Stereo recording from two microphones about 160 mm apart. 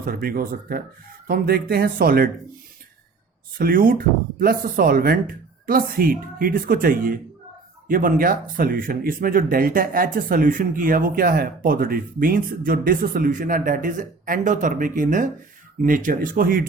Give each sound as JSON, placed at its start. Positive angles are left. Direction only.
{"t": 0.0, "sound": "speech", "side_deg": -65}
{"t": 3.6, "sound": "speech", "side_deg": -65}